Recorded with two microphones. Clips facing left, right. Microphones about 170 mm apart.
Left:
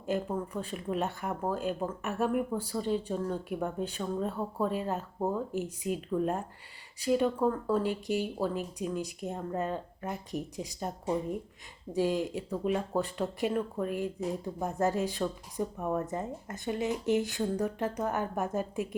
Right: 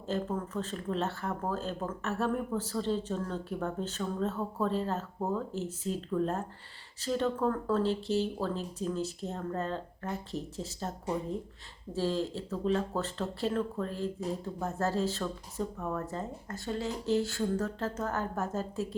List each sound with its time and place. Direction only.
0.0 s speech: 10° left (ahead or behind)